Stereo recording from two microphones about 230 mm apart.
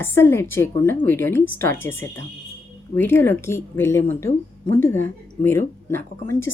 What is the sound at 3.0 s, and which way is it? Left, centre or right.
Speech, centre.